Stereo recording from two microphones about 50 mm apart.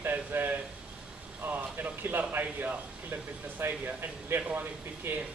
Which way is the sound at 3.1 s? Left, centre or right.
Right.